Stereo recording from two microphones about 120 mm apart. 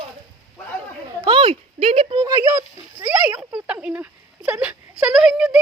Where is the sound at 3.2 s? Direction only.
15° right (ahead or behind).